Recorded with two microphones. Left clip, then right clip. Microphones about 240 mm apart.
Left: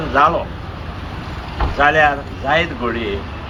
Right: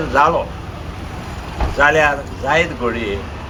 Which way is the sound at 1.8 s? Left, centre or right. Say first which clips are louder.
Even; right.